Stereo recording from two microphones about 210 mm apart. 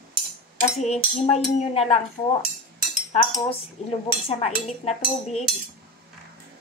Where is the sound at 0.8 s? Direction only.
30° left (ahead or behind).